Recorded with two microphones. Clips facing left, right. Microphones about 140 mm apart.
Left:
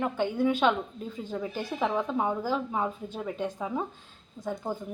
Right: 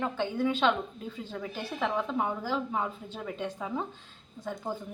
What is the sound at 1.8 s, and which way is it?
Speech, 15° left (ahead or behind).